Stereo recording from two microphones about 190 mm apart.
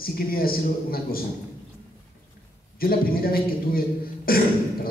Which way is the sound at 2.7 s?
50° left (ahead or behind).